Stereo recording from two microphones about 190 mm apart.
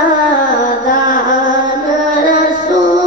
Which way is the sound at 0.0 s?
45° left (ahead or behind).